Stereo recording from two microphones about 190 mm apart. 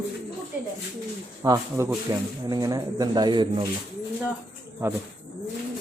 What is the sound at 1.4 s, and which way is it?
Speech, 15° right (ahead or behind).